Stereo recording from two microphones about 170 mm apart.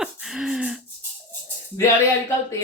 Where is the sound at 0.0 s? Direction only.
5° right (ahead or behind).